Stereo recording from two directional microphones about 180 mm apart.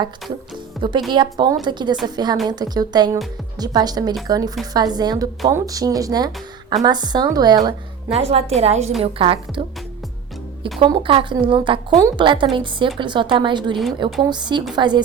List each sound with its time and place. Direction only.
0.8 s speech: 25° right (ahead or behind)
8.1 s a woman's voice: 35° right (ahead or behind)
10.8 s speech: 30° right (ahead or behind)